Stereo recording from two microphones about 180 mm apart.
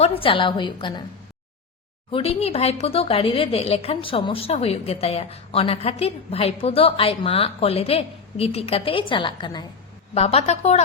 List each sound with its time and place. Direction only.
0.0 s a woman's voice: 30° left (ahead or behind)
2.0 s a woman's voice: 30° left (ahead or behind)
10.2 s a woman's voice: 35° left (ahead or behind)